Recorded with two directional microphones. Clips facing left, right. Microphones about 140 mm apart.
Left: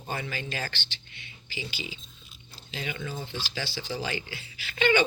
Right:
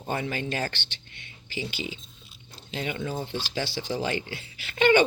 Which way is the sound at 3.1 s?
40° right (ahead or behind).